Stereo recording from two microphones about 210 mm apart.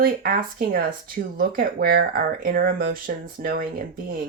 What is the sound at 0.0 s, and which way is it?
Speech, 45° right (ahead or behind).